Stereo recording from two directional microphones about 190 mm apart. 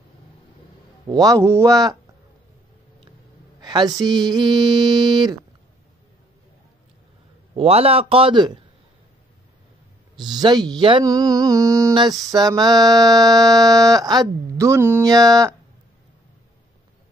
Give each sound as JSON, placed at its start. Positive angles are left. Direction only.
{"t": 1.0, "sound": "speech", "side_deg": -20}
{"t": 3.6, "sound": "a woman's voice", "side_deg": -20}
{"t": 7.5, "sound": "speech", "side_deg": -30}
{"t": 10.1, "sound": "speech", "side_deg": -20}